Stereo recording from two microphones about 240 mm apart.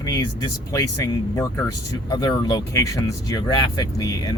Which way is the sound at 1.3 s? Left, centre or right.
Centre.